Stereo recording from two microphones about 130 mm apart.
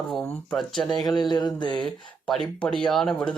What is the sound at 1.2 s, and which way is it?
Mantra, 35° left (ahead or behind).